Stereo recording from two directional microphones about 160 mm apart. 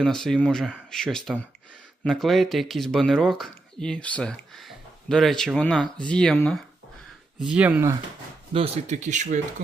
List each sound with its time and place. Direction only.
0.0 s speech: 5° left (ahead or behind)
7.4 s speech: 10° right (ahead or behind)
8.5 s speech: 40° right (ahead or behind)